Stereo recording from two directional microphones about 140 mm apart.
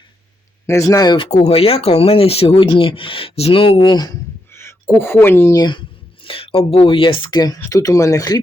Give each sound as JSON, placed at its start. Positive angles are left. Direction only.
{"t": 0.7, "sound": "speech", "side_deg": 20}
{"t": 1.3, "sound": "speech", "side_deg": 45}
{"t": 4.5, "sound": "a sound", "side_deg": 15}
{"t": 5.2, "sound": "speech", "side_deg": 15}
{"t": 5.5, "sound": "speech", "side_deg": 30}
{"t": 6.2, "sound": "speech", "side_deg": 40}